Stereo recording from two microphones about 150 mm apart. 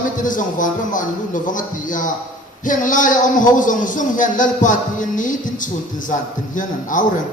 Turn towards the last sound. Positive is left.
turn(degrees=60)  # may be behind; listen again after turning